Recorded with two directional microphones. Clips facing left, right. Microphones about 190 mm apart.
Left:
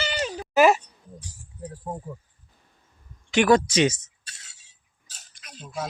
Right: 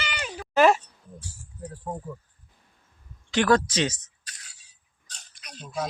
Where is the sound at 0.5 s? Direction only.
5° left (ahead or behind).